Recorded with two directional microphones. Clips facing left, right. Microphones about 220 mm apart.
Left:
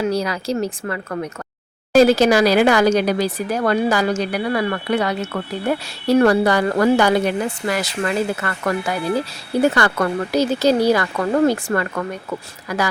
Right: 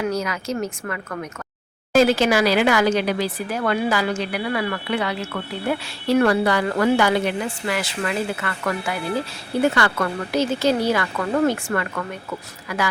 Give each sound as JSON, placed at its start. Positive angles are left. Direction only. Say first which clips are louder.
{"t": 0.0, "sound": "speech", "louder": "left 3 dB", "side_deg": 35}
{"t": 9.7, "sound": "speech", "louder": "left 3 dB", "side_deg": 40}